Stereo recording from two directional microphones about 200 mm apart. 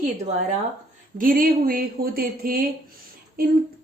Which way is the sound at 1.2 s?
45° right (ahead or behind).